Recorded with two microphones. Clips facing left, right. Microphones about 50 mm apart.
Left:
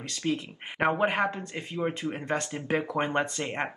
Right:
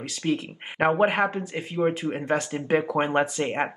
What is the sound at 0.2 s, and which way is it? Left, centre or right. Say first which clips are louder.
Speech: right 4 dB; centre.